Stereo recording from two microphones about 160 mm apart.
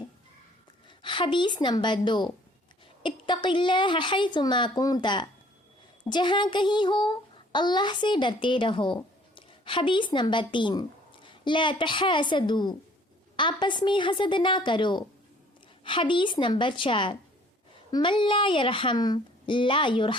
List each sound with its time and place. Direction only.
0.9 s a woman's voice: 30° left (ahead or behind)